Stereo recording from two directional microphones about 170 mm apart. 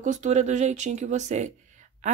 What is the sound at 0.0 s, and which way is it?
Speech, 45° right (ahead or behind).